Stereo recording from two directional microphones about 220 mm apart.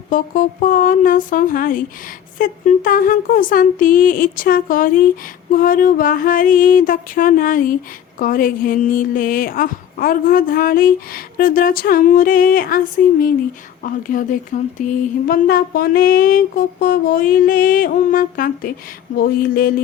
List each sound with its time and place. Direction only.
0.1 s speech: 40° left (ahead or behind)